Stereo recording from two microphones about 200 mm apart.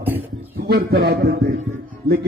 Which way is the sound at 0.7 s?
50° right (ahead or behind).